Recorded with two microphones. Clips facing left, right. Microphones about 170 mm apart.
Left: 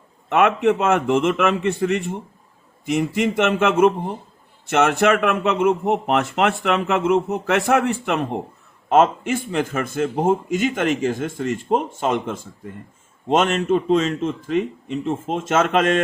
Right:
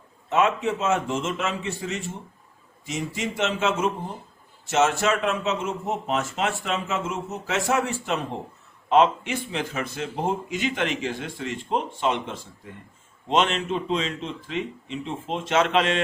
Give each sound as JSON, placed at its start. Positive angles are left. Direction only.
{"t": 0.3, "sound": "a man's voice", "side_deg": 65}
{"t": 8.9, "sound": "a man's voice", "side_deg": 45}